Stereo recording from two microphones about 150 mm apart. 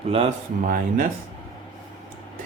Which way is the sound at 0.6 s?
65° right (ahead or behind).